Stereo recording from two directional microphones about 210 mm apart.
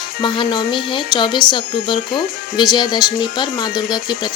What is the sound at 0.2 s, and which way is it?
A woman's voice, 20° left (ahead or behind).